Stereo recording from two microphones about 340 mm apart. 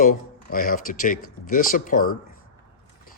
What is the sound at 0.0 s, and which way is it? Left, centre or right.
Speech, left.